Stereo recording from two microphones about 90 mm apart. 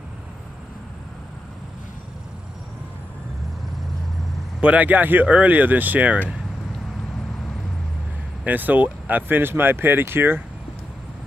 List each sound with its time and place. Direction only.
4.6 s speech: 15° right (ahead or behind)
8.5 s speech: 20° right (ahead or behind)